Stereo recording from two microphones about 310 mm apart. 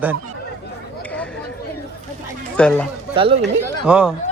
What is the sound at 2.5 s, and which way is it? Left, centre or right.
Speech, centre.